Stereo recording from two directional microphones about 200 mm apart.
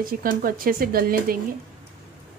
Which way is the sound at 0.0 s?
45° right (ahead or behind).